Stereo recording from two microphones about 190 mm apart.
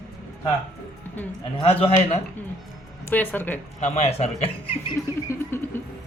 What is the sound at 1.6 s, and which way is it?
Speech, 30° left (ahead or behind).